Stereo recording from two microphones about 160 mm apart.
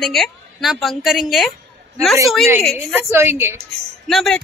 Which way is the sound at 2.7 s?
5° left (ahead or behind).